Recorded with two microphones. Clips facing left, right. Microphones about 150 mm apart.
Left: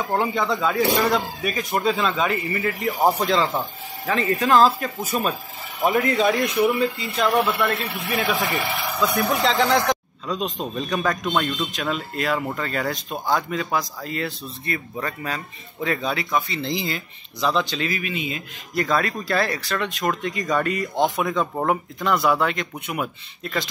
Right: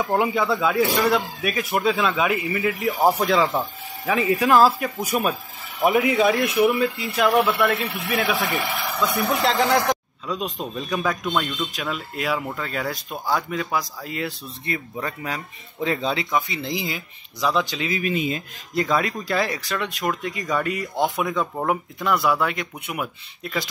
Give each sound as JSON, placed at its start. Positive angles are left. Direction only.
{"t": 0.1, "sound": "a man's voice", "side_deg": -5}
{"t": 8.0, "sound": "a man's voice", "side_deg": 5}
{"t": 18.0, "sound": "speech", "side_deg": -40}
{"t": 18.8, "sound": "speech", "side_deg": -15}